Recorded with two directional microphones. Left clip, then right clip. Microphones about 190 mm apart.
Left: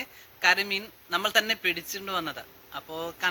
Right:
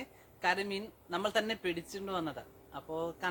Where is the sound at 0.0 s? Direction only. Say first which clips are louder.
Left 9 dB; 10° right (ahead or behind).